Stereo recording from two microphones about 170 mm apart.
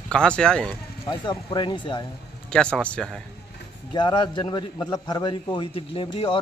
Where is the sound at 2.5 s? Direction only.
5° left (ahead or behind).